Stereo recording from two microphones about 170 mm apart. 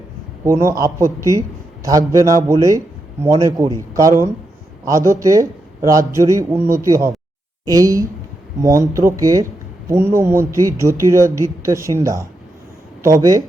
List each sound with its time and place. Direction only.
0.4 s a man's voice: 15° right (ahead or behind)